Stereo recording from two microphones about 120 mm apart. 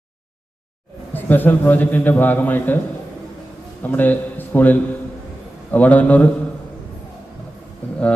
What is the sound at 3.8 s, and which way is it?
A man's voice, 15° left (ahead or behind).